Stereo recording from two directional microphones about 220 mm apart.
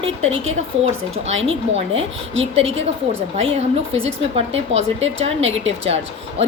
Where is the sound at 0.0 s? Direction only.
25° right (ahead or behind).